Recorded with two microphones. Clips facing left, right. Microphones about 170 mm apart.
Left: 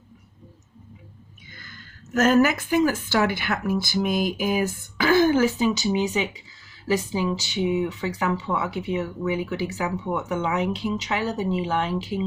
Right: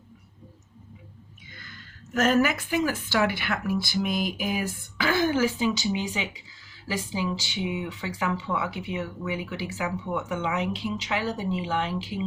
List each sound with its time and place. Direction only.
1.5 s speech: 40° left (ahead or behind)